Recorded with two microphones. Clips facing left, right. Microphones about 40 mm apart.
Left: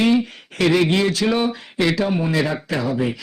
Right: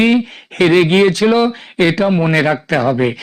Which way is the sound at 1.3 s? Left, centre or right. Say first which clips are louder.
Right 7 dB; right.